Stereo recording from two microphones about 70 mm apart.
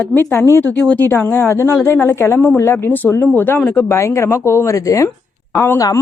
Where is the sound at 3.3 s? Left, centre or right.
Left.